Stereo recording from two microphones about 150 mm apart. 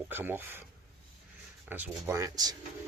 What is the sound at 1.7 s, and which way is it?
Speech, 15° right (ahead or behind).